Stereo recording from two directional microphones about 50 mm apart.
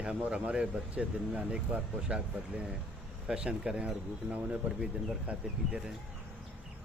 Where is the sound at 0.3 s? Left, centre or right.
Centre.